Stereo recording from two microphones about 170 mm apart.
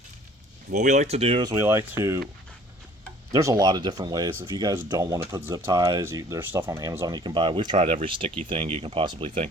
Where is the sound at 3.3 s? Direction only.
20° right (ahead or behind).